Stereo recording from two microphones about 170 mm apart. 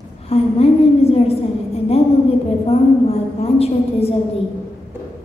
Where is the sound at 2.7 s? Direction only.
35° left (ahead or behind).